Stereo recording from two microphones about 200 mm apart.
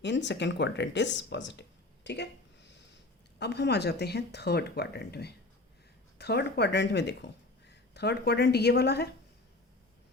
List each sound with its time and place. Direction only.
0.0 s speech: 60° left (ahead or behind)
3.3 s speech: 55° left (ahead or behind)